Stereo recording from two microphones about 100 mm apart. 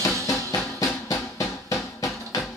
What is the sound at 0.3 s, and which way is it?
Music, 35° left (ahead or behind).